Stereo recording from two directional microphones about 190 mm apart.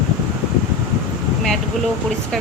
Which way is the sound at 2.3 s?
Centre (ahead or behind).